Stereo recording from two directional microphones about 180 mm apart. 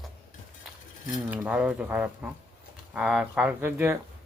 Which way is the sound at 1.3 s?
10° right (ahead or behind).